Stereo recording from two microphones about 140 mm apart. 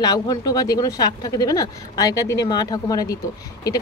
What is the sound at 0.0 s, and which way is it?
Speech, 30° left (ahead or behind).